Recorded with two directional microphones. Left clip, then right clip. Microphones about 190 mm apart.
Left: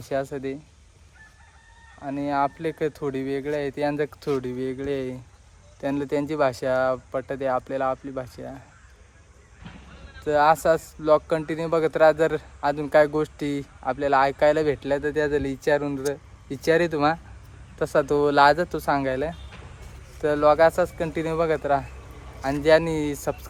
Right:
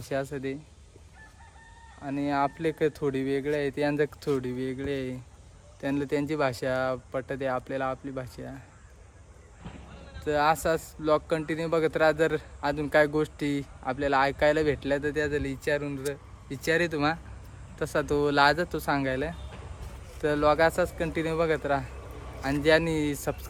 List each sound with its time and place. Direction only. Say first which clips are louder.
0.0 s speech: left 4 dB; 5° right (ahead or behind)
2.0 s speech: left 3 dB; 10° right (ahead or behind)
9.6 s a sound: left 1 dB; 55° right (ahead or behind)
10.2 s speech: left 6 dB; centre (ahead or behind)